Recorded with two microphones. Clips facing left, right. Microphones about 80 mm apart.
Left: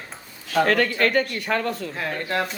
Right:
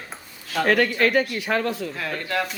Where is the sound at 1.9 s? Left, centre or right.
Left.